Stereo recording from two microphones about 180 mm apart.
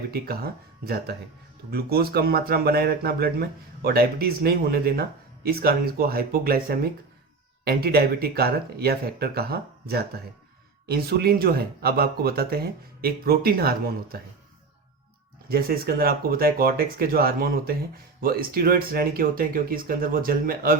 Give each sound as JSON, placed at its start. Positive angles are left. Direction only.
{"t": 0.1, "sound": "speech", "side_deg": -60}
{"t": 15.4, "sound": "speech", "side_deg": -55}